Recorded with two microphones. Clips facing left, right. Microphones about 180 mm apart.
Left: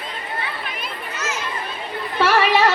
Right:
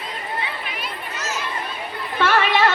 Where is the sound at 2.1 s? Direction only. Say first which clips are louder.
Left 2 dB; 40° left (ahead or behind).